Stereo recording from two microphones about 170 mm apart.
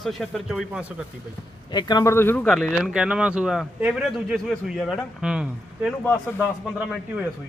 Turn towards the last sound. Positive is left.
turn(degrees=-5)  # may be behind; listen again after turning